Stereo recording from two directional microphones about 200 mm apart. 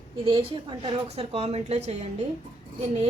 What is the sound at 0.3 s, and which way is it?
A woman's voice, 25° right (ahead or behind).